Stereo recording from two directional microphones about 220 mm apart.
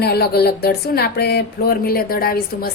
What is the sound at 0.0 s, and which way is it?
A woman's voice, 45° left (ahead or behind).